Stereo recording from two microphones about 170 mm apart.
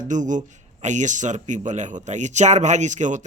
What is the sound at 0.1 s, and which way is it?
A man's voice, 45° right (ahead or behind).